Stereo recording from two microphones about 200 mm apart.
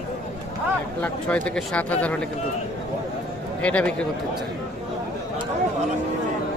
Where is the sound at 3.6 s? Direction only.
5° left (ahead or behind).